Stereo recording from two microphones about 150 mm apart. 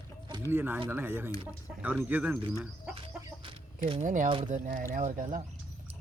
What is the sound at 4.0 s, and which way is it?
Speech, 55° right (ahead or behind).